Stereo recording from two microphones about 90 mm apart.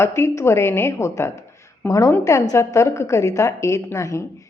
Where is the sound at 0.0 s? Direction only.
30° left (ahead or behind).